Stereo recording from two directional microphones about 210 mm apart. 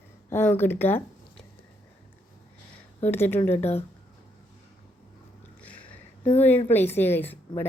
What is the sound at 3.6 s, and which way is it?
Speech, 30° left (ahead or behind).